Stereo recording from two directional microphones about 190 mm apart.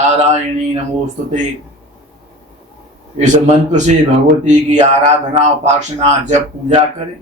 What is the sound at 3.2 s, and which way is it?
Speech, 40° right (ahead or behind).